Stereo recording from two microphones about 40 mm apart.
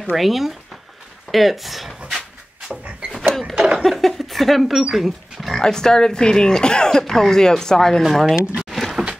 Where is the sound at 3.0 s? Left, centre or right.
Centre.